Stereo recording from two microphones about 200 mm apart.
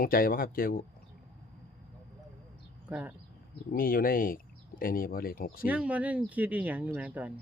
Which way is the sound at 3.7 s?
45° left (ahead or behind).